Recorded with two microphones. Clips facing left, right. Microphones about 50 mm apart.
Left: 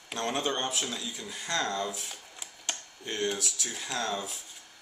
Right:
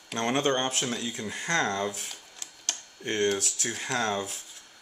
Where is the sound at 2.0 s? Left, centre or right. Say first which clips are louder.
Even; centre.